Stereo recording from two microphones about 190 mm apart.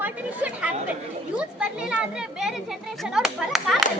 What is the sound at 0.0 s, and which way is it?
Chatter, 10° right (ahead or behind).